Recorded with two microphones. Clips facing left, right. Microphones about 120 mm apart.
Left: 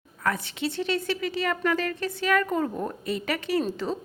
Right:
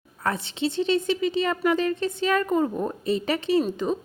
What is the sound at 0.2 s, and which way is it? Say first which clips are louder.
Speech: right 2 dB; 25° right (ahead or behind).